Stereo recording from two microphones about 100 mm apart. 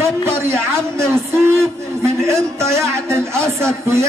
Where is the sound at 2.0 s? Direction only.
30° right (ahead or behind).